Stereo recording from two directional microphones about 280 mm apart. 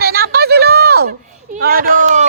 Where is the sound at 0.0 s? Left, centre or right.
Right.